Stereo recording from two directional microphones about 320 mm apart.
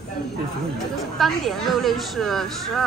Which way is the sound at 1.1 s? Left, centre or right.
Centre.